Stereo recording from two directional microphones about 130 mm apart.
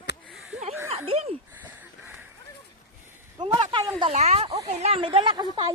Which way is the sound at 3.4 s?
35° right (ahead or behind).